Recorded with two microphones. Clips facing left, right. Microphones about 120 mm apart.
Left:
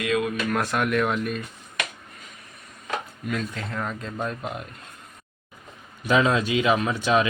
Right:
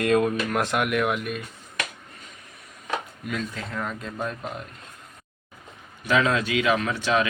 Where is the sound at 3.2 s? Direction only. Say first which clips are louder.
Left 2 dB; centre (ahead or behind).